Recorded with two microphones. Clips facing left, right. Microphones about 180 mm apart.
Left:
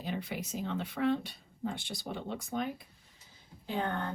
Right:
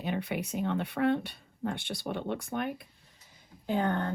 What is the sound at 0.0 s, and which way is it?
Speech, 65° right (ahead or behind).